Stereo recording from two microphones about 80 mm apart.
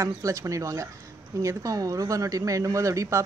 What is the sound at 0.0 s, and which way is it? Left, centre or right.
A woman's voice, right.